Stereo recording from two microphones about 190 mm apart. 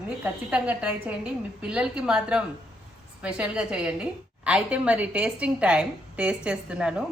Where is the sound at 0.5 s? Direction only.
5° right (ahead or behind).